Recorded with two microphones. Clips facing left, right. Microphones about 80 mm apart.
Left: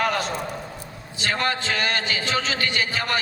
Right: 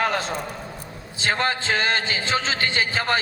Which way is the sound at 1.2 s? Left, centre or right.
Right.